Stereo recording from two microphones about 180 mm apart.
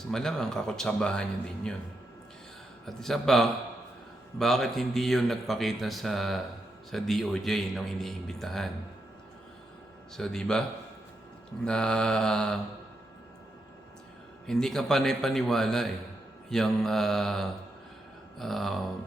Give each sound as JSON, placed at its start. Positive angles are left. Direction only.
{"t": 0.0, "sound": "speech", "side_deg": 5}
{"t": 2.8, "sound": "speech", "side_deg": 0}
{"t": 10.2, "sound": "speech", "side_deg": 5}
{"t": 14.4, "sound": "speech", "side_deg": 0}